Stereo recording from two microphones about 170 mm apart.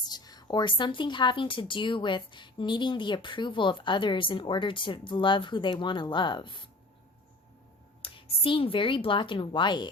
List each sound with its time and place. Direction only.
0.1 s a woman's voice: 25° left (ahead or behind)
8.0 s speech: 30° left (ahead or behind)